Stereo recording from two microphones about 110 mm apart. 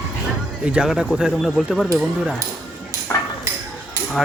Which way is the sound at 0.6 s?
10° right (ahead or behind).